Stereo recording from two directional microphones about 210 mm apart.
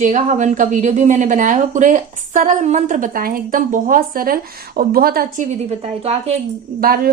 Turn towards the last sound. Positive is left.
turn(degrees=-45)  # may be behind; listen again after turning